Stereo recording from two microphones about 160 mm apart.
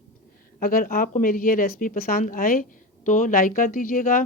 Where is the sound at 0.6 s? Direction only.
60° left (ahead or behind).